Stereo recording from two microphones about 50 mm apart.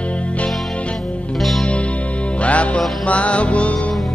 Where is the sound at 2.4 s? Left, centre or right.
Left.